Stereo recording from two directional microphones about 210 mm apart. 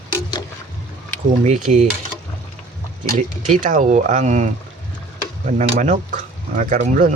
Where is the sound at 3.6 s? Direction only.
35° right (ahead or behind).